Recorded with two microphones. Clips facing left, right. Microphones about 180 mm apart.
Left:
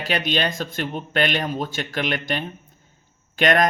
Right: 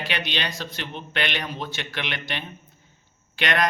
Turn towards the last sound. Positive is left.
turn(degrees=45)  # may be behind; listen again after turning